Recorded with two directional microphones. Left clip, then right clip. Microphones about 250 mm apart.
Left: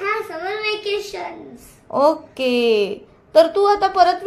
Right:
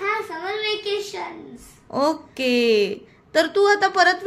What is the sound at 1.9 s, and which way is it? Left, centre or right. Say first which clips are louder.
Speech: left 5 dB; right.